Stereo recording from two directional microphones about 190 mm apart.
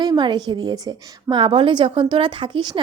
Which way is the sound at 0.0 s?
25° right (ahead or behind).